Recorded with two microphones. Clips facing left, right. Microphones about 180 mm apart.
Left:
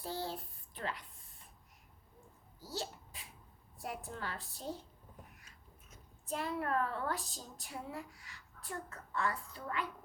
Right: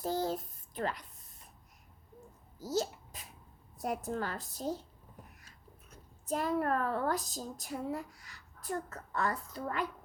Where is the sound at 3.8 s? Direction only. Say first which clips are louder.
Right 8 dB; 40° right (ahead or behind).